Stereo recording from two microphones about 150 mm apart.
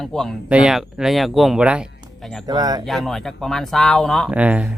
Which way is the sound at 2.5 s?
25° right (ahead or behind).